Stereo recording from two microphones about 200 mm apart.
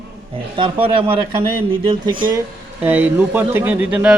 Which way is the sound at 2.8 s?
10° right (ahead or behind).